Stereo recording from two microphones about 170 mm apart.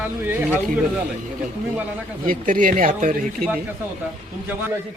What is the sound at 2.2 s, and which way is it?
Speech, 55° right (ahead or behind).